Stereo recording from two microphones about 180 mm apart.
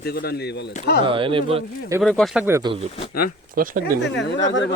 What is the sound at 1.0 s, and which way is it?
Speech, 30° right (ahead or behind).